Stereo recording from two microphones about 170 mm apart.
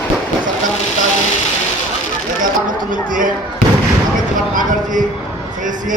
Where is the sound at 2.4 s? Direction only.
50° right (ahead or behind).